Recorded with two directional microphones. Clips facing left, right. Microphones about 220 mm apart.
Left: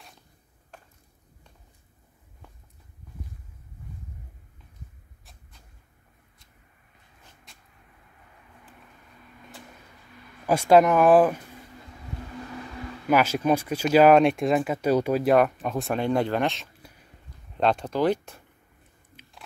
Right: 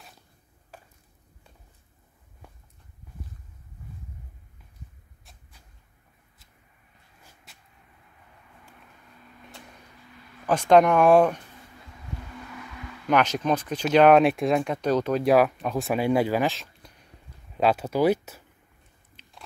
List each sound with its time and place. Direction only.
7.5 s vehicle: 5° right (ahead or behind)
10.4 s speech: 10° left (ahead or behind)
12.5 s a sound: 35° left (ahead or behind)
13.1 s speech: 5° left (ahead or behind)
15.2 s speech: centre (ahead or behind)
19.1 s biting: 5° right (ahead or behind)